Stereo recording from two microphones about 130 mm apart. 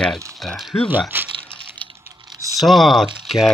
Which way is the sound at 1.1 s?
15° right (ahead or behind).